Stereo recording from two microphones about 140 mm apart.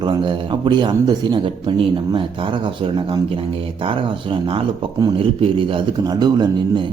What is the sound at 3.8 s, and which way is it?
A man's voice, 40° right (ahead or behind).